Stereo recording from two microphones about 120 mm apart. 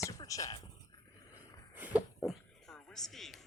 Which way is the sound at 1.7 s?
15° right (ahead or behind).